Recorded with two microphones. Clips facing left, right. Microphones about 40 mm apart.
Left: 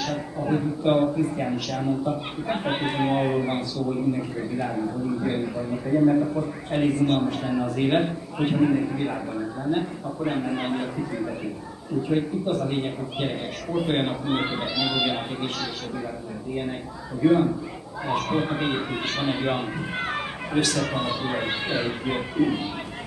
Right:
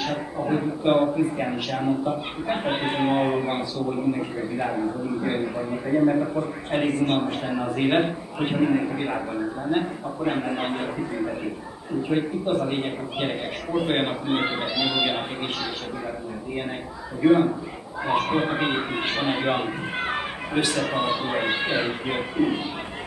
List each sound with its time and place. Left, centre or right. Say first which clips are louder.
0.0 s speech: right 1 dB; centre
17.2 s speech: right 1 dB; centre